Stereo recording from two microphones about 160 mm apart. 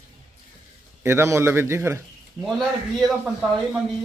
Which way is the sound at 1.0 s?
15° right (ahead or behind).